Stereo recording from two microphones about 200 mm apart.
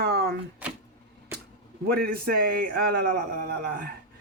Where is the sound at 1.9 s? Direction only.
50° right (ahead or behind).